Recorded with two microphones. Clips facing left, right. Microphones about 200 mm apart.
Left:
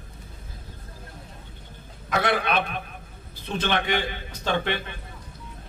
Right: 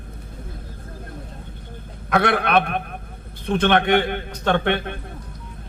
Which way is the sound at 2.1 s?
60° right (ahead or behind).